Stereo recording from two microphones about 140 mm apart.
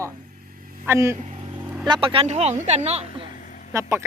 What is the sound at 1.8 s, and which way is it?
Speech, 35° right (ahead or behind).